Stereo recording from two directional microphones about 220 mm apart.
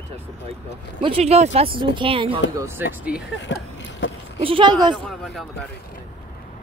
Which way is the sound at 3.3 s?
55° left (ahead or behind).